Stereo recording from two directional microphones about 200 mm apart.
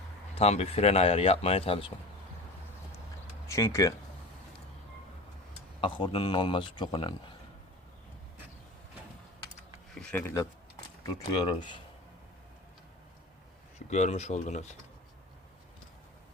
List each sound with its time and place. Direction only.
0.3 s speech: 30° left (ahead or behind)
3.4 s speech: 15° left (ahead or behind)
5.8 s speech: 25° left (ahead or behind)
9.9 s speech: 5° left (ahead or behind)
11.0 s speech: 25° left (ahead or behind)
13.7 s speech: 35° left (ahead or behind)